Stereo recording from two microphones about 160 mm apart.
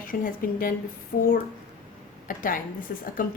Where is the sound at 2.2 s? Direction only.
60° left (ahead or behind).